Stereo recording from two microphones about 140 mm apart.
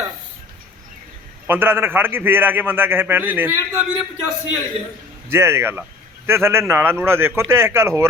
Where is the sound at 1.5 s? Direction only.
15° right (ahead or behind).